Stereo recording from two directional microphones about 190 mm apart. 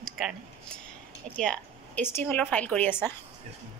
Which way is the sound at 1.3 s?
5° left (ahead or behind).